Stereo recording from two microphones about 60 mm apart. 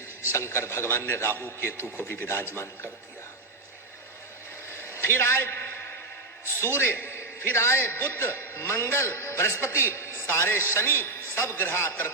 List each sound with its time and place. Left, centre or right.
0.3 s a man's voice: left
4.7 s a sound: left
6.7 s a man's voice: left
7.9 s a man's voice: left